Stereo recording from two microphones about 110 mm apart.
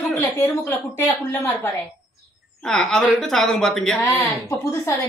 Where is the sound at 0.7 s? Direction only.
25° left (ahead or behind).